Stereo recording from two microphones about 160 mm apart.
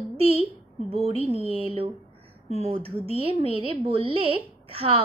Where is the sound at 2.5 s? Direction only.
40° right (ahead or behind).